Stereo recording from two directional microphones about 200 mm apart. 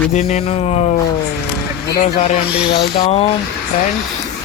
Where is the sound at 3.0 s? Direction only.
30° left (ahead or behind).